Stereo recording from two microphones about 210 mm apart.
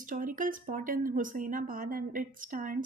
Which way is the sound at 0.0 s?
40° right (ahead or behind).